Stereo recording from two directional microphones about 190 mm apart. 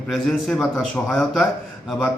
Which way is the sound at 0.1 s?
Centre (ahead or behind).